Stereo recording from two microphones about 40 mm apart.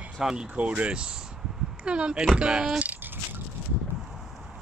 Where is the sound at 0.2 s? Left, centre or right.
Centre.